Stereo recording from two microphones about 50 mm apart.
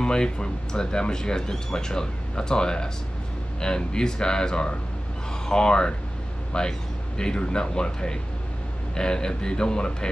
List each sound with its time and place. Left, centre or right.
0.0 s speech: centre